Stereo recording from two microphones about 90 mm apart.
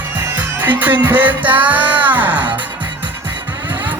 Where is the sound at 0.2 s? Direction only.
20° right (ahead or behind).